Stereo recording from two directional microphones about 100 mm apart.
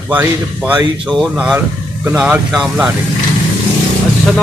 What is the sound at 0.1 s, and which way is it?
Speech, 15° right (ahead or behind).